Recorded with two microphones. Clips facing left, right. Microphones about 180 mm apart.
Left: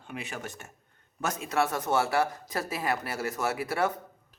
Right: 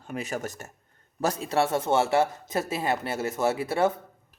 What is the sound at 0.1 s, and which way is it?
A man's voice, 40° right (ahead or behind).